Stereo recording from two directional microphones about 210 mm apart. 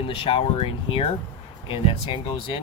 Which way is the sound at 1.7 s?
25° left (ahead or behind).